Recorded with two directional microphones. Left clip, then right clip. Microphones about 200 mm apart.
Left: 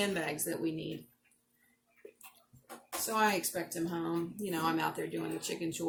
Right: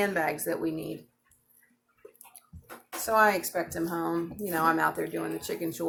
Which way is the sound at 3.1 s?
15° left (ahead or behind).